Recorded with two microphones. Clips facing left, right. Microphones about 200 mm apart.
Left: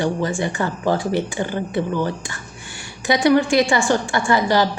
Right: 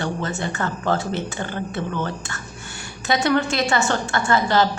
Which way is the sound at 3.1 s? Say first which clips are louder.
Left 5 dB; 15° left (ahead or behind).